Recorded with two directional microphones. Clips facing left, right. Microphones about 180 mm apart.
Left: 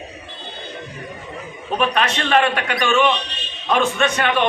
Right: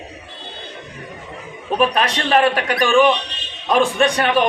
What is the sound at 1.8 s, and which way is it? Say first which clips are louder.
A man's voice: right 2 dB; 40° right (ahead or behind).